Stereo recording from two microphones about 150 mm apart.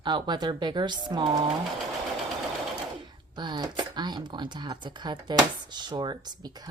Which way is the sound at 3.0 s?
30° right (ahead or behind).